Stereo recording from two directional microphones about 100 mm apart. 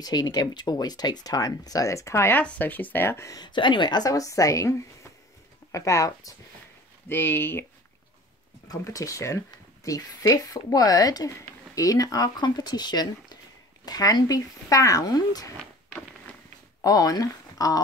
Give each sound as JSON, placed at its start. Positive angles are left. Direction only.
{"t": 0.0, "sound": "speech", "side_deg": 40}
{"t": 2.4, "sound": "speech", "side_deg": 15}
{"t": 3.3, "sound": "speech", "side_deg": 50}
{"t": 7.1, "sound": "speech", "side_deg": 20}
{"t": 8.6, "sound": "speech", "side_deg": 35}
{"t": 16.8, "sound": "speech", "side_deg": 40}